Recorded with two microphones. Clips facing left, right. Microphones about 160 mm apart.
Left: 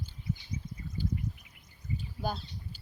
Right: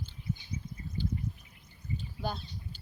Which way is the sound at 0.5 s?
30° left (ahead or behind).